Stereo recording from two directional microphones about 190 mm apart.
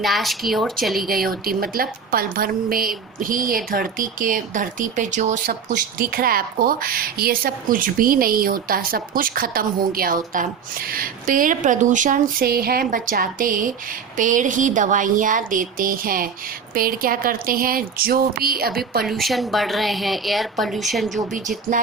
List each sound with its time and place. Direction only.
0.0 s a woman's voice: centre (ahead or behind)
1.0 s speech: 50° right (ahead or behind)
19.0 s a woman's voice: centre (ahead or behind)